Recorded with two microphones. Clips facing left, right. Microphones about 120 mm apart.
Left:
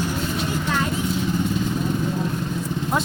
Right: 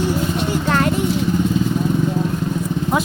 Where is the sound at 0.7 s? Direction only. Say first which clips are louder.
Right 8 dB; 65° right (ahead or behind).